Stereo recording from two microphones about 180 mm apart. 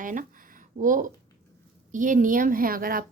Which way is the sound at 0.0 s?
45° right (ahead or behind).